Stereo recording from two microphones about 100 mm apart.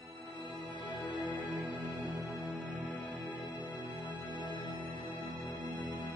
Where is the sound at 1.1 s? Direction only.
15° right (ahead or behind).